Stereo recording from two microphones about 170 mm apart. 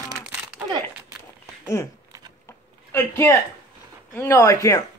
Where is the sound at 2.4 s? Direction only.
15° left (ahead or behind).